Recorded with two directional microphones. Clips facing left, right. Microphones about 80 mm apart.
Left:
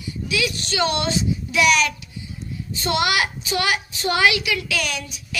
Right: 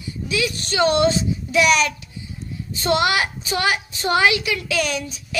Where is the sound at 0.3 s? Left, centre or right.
Right.